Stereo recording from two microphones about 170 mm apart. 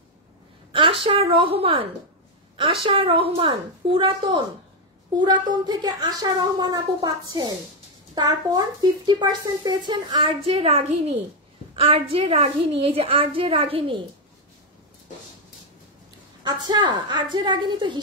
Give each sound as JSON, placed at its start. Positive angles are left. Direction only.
{"t": 0.7, "sound": "a woman's voice", "side_deg": -30}
{"t": 16.4, "sound": "speech", "side_deg": -25}